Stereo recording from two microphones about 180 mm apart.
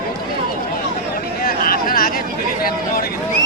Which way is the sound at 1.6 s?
55° left (ahead or behind).